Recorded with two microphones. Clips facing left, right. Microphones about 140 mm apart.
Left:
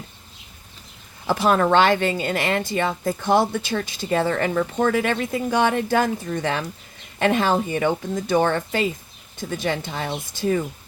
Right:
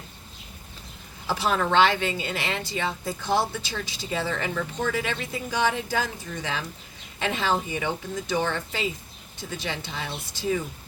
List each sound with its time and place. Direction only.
1.3 s a woman's voice: 50° left (ahead or behind)